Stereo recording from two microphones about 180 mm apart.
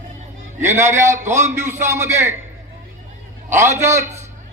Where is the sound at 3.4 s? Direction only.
15° right (ahead or behind).